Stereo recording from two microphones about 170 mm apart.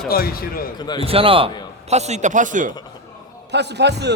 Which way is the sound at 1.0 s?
35° right (ahead or behind).